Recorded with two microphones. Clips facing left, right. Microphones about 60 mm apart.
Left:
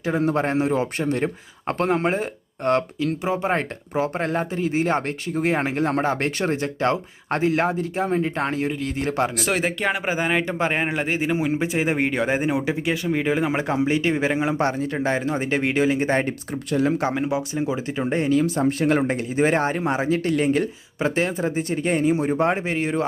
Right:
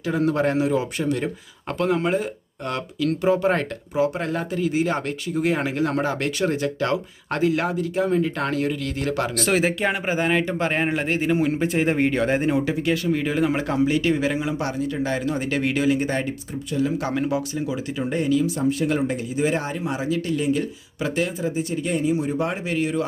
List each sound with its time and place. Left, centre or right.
0.0 s speech: left
3.1 s speech: centre
3.9 s speech: left
9.3 s speech: centre
10.8 s speech: centre; by 18.3 s left
18.3 s speech: left
21.0 s speech: left